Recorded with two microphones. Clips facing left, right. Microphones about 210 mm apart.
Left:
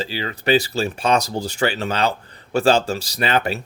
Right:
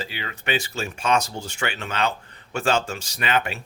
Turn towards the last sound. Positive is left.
turn(degrees=35)  # may be behind; listen again after turning